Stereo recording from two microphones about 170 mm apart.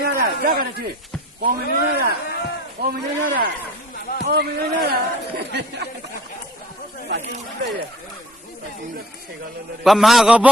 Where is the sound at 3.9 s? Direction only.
60° left (ahead or behind).